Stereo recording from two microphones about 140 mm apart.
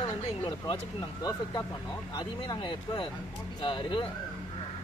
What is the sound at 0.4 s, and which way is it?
Speech, 40° left (ahead or behind).